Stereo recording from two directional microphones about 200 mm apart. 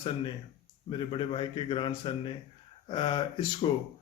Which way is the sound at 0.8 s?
25° left (ahead or behind).